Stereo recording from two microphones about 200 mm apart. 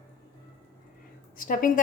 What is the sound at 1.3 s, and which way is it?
Speech, 40° left (ahead or behind).